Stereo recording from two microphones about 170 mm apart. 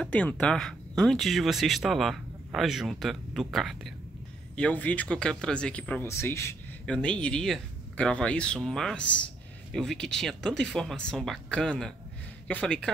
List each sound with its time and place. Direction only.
0.0 s speech: 10° left (ahead or behind)